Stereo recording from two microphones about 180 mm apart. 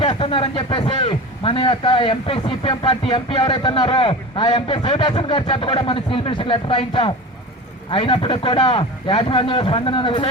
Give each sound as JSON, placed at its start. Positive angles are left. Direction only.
{"t": 0.0, "sound": "a man's voice", "side_deg": 30}